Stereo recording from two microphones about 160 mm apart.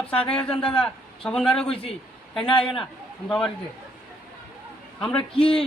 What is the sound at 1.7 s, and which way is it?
Speech, 35° left (ahead or behind).